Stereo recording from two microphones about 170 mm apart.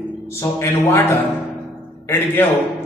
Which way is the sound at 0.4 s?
15° left (ahead or behind).